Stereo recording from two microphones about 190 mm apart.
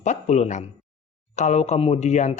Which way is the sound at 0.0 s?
40° left (ahead or behind).